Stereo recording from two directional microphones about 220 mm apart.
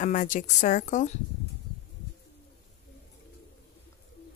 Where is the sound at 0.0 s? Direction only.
35° left (ahead or behind).